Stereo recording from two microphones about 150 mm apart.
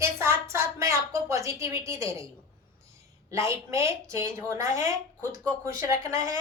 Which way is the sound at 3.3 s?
20° right (ahead or behind).